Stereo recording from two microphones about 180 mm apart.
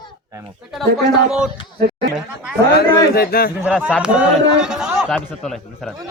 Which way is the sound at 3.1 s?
55° left (ahead or behind).